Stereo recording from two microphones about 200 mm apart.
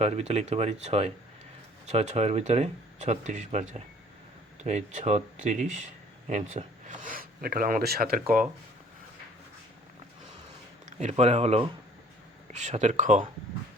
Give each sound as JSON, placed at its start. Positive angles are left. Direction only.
{"t": 0.0, "sound": "speech", "side_deg": -35}
{"t": 10.8, "sound": "speech", "side_deg": -35}